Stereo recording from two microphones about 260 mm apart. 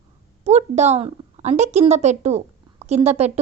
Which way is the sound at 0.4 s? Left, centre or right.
Right.